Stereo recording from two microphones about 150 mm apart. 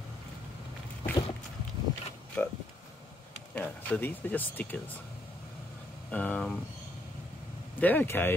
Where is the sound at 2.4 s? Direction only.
5° left (ahead or behind).